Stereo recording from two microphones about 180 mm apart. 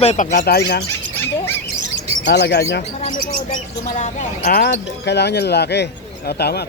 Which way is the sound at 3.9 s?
40° left (ahead or behind).